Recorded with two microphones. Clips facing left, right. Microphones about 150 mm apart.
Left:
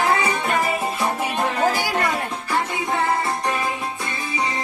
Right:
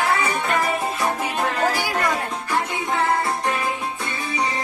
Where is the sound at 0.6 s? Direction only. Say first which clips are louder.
Even; 5° left (ahead or behind).